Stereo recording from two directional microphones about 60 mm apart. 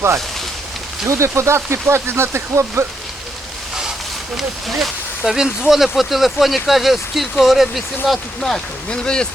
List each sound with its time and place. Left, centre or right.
1.0 s speech: right
4.4 s speech: centre